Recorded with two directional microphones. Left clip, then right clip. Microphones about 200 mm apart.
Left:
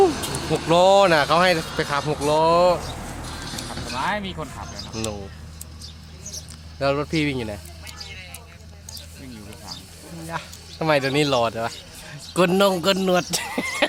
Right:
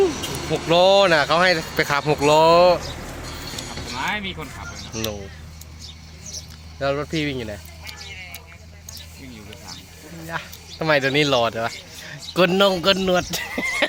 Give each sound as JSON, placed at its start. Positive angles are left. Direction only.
{"t": 0.5, "sound": "speech", "side_deg": 5}
{"t": 1.7, "sound": "speech", "side_deg": -15}
{"t": 3.9, "sound": "speech", "side_deg": 20}
{"t": 4.9, "sound": "speech", "side_deg": 5}
{"t": 6.7, "sound": "speech", "side_deg": 15}
{"t": 10.2, "sound": "speech", "side_deg": 0}